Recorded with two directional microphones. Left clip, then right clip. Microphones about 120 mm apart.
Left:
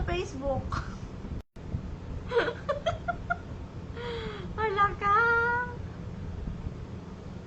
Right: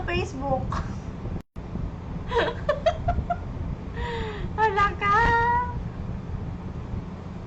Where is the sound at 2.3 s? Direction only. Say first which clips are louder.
Right 4 dB; 20° right (ahead or behind).